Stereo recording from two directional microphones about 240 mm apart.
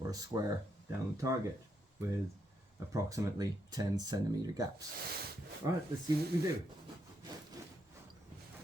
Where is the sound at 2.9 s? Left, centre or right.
Centre.